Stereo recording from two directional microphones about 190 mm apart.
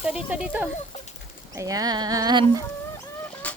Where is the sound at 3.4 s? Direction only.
5° left (ahead or behind).